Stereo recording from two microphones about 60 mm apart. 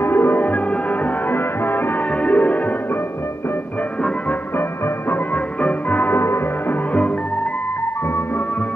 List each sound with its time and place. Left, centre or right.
0.0 s music: left
2.2 s music: left
5.1 s music: left